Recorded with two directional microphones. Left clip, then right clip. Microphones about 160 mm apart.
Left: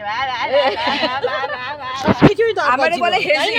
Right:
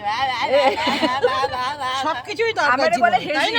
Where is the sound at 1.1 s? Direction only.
5° left (ahead or behind).